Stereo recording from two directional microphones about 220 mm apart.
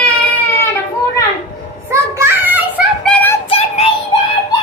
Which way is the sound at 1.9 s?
10° right (ahead or behind).